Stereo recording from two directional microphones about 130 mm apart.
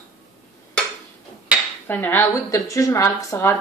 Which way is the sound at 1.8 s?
15° left (ahead or behind).